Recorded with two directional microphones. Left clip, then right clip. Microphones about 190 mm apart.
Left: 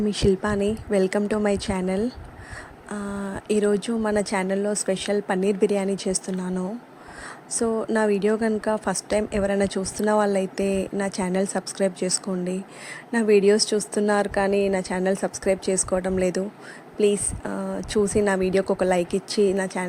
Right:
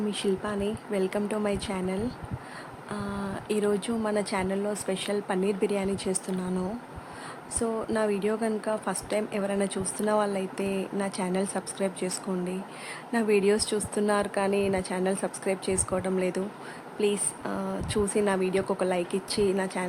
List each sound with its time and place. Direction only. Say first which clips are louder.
0.1 s a woman's voice: left 9 dB; 30° left (ahead or behind)
7.6 s a woman's voice: left 5 dB; 25° left (ahead or behind)